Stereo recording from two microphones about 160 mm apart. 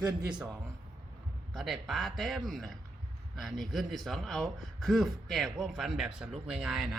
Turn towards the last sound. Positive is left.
turn(degrees=0)  # may be behind; listen again after turning